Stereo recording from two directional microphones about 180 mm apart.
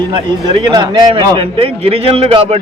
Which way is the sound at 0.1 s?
25° right (ahead or behind).